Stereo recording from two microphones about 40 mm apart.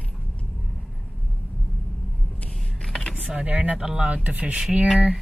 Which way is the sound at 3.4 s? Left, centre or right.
Right.